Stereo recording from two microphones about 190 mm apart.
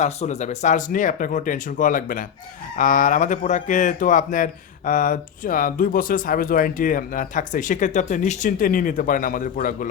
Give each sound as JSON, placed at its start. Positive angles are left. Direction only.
{"t": 0.0, "sound": "speech", "side_deg": 35}